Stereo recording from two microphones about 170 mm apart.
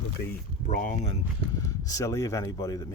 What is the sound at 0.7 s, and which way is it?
Speech, 50° left (ahead or behind).